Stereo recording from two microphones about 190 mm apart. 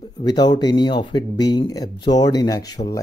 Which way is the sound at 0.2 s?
20° left (ahead or behind).